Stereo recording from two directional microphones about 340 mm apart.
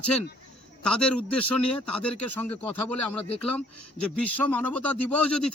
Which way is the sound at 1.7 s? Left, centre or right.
Centre.